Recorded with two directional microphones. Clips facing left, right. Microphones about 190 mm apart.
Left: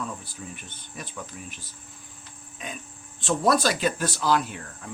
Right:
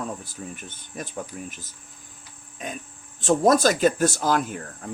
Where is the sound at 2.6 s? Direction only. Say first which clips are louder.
Right 4 dB; 45° right (ahead or behind).